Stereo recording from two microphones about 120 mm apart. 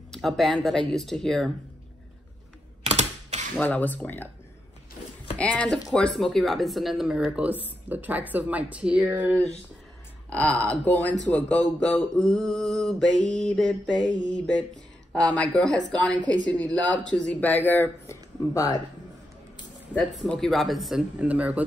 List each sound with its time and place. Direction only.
0.1 s mantra: centre (ahead or behind)
2.8 s computer keyboard: 65° right (ahead or behind)
3.5 s speech: 10° left (ahead or behind)
5.4 s speech: 10° left (ahead or behind); by 9.4 s 10° right (ahead or behind)
10.3 s speech: 10° left (ahead or behind)
11.8 s mantra: centre (ahead or behind)
15.1 s speech: 10° left (ahead or behind)
18.4 s speech: 25° left (ahead or behind)
20.0 s mantra: centre (ahead or behind)